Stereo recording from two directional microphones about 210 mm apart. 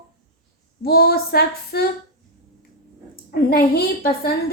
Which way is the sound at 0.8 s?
45° left (ahead or behind).